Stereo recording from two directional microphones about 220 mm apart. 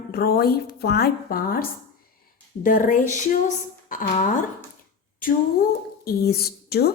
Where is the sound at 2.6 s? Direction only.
35° left (ahead or behind).